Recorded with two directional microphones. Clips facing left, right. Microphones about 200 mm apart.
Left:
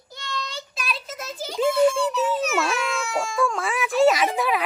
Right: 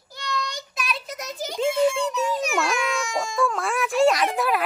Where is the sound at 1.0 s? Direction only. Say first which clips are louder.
Right 1 dB; 15° right (ahead or behind).